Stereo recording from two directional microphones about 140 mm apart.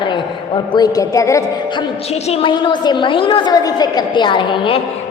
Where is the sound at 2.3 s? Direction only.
35° left (ahead or behind).